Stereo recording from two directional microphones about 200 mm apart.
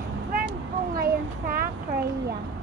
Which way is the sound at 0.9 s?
45° right (ahead or behind).